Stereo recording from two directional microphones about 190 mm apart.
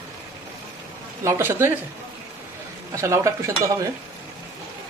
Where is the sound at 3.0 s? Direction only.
15° right (ahead or behind).